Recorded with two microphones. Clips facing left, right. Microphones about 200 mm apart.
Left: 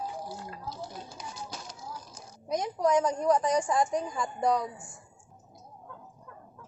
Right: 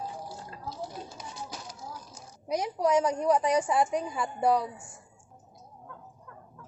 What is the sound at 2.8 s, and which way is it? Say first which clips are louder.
A woman's voice: even; 10° right (ahead or behind).